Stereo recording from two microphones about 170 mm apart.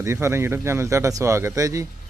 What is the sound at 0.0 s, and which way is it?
Speech, 15° right (ahead or behind).